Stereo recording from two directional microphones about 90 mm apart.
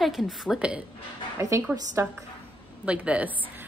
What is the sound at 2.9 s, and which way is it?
Speech, 15° right (ahead or behind).